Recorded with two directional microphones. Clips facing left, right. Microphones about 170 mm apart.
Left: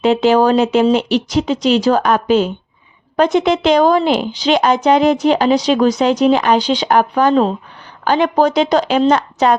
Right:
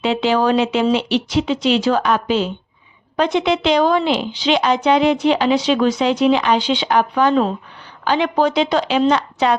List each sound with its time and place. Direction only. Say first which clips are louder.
0.0 s a woman's voice: left 5 dB; 45° left (ahead or behind)